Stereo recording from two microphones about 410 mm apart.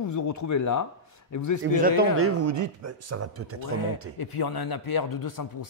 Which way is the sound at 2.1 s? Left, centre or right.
Right.